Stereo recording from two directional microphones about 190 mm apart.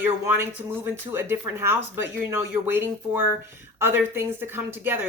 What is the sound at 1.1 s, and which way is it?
Speech, 10° right (ahead or behind).